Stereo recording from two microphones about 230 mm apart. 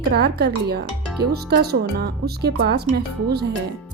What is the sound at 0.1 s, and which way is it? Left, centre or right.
Speech, right.